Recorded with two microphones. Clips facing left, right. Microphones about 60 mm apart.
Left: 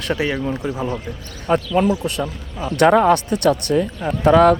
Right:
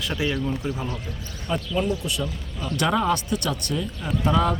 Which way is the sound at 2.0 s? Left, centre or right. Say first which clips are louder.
Left 5 dB; left.